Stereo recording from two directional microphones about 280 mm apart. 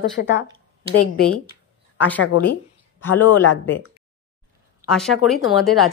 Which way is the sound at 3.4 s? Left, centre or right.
Left.